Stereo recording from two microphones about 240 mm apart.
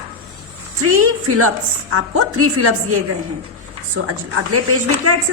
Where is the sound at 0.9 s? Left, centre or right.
Right.